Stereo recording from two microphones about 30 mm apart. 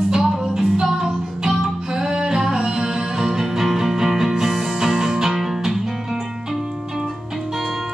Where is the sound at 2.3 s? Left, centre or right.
Centre.